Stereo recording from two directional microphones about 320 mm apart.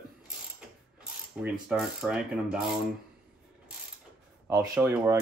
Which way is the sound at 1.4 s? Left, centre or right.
Centre.